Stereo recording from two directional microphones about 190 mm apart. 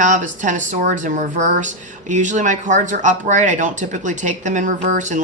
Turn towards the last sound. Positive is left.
turn(degrees=-40)  # may be behind; listen again after turning